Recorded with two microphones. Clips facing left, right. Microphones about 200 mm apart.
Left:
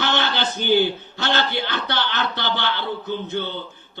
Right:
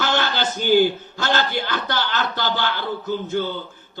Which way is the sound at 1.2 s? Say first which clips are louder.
Right 1 dB; 45° right (ahead or behind).